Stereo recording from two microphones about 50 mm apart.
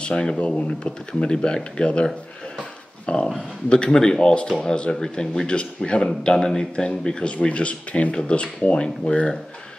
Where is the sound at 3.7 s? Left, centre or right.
Centre.